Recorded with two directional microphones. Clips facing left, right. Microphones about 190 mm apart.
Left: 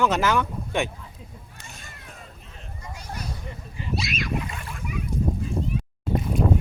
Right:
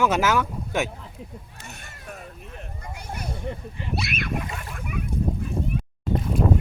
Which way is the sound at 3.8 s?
60° right (ahead or behind).